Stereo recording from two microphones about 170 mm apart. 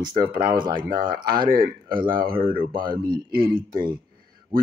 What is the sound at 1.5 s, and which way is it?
Speech, 60° right (ahead or behind).